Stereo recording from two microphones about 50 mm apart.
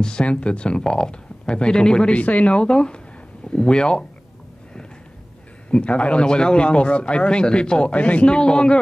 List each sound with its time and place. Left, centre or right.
0.0 s a man's voice: centre
2.1 s a man's voice: left
5.7 s a man's voice: left